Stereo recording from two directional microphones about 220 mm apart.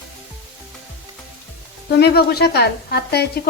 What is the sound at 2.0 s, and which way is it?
Speech, 45° left (ahead or behind).